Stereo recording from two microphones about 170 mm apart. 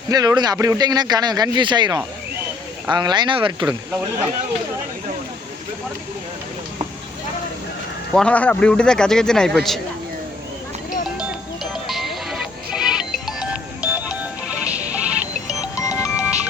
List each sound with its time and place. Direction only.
0.1 s speech: 20° right (ahead or behind)
8.1 s a man's voice: 5° left (ahead or behind)
11.2 s music: centre (ahead or behind)
15.4 s music: 20° left (ahead or behind)